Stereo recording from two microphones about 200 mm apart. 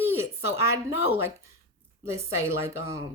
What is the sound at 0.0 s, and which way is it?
Speech, 10° right (ahead or behind).